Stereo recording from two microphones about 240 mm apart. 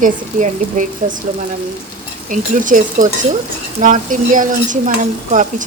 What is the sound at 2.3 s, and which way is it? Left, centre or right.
Speech, right.